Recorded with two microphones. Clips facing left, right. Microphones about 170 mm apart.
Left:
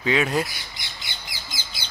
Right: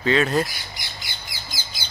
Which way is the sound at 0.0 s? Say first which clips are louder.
Right 2 dB; 10° left (ahead or behind).